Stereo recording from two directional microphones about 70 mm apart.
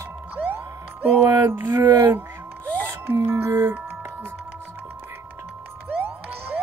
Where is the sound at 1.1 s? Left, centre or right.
Right.